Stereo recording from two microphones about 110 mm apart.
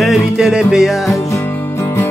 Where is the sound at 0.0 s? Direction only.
5° right (ahead or behind).